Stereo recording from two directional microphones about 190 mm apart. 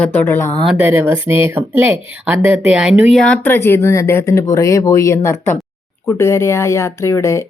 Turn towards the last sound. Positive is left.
turn(degrees=15)  # may be behind; listen again after turning